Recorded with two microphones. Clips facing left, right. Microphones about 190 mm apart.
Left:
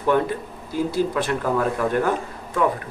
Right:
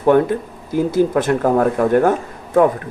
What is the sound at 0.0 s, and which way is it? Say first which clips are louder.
A woman's voice: right 7 dB; 50° right (ahead or behind).